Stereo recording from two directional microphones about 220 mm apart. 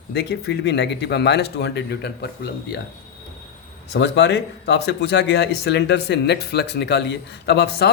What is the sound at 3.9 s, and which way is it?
Speech, 50° left (ahead or behind).